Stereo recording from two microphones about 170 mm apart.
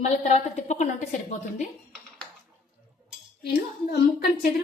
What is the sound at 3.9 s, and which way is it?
Speech, 70° left (ahead or behind).